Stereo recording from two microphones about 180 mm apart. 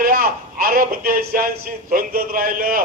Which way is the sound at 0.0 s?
55° right (ahead or behind).